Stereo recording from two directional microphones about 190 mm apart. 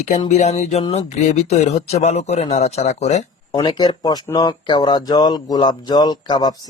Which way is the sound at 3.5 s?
20° left (ahead or behind).